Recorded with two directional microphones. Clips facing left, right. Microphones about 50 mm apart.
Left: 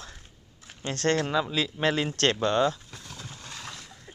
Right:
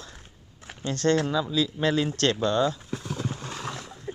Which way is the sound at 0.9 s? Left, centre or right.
Left.